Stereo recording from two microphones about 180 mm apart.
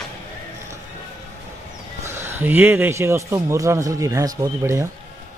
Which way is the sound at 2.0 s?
15° right (ahead or behind).